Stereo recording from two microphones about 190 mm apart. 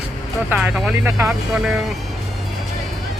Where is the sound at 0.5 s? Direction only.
5° right (ahead or behind).